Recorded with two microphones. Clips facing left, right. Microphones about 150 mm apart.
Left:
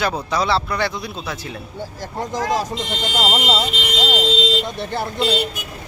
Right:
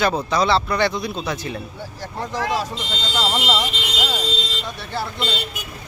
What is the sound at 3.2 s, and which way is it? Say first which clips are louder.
Speech: left 1 dB; 15° left (ahead or behind).